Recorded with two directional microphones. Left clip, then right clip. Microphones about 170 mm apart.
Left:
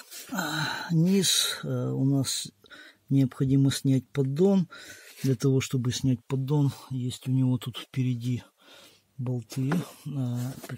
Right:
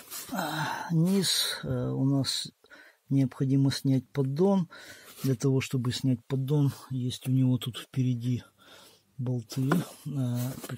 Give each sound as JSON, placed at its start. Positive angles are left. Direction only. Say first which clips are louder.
{"t": 0.3, "sound": "a sound", "louder": "left 1 dB", "side_deg": 15}
{"t": 1.2, "sound": "speech", "louder": "left 3 dB", "side_deg": 15}
{"t": 3.1, "sound": "speech", "louder": "left 2 dB", "side_deg": 35}
{"t": 6.4, "sound": "speech", "louder": "left 1 dB", "side_deg": 5}